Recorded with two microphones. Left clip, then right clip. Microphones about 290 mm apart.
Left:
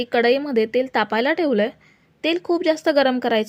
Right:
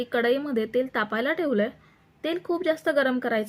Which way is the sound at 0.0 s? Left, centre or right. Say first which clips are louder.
Left 6 dB; centre.